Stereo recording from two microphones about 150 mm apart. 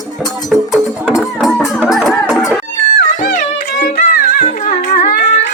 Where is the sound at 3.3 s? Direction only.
70° left (ahead or behind).